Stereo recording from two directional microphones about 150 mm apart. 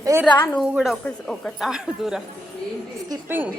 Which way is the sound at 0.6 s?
5° right (ahead or behind).